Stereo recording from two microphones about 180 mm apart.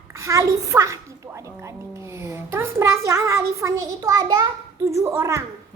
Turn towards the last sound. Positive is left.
turn(degrees=-15)  # may be behind; listen again after turning